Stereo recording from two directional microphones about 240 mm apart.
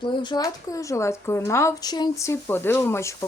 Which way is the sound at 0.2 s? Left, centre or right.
Centre.